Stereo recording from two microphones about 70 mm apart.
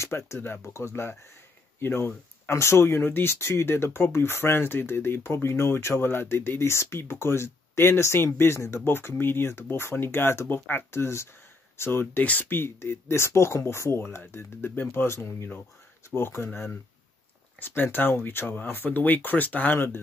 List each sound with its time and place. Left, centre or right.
0.0 s speech: left
17.6 s speech: left